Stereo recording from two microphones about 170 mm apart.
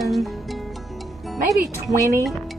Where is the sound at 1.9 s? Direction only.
20° right (ahead or behind).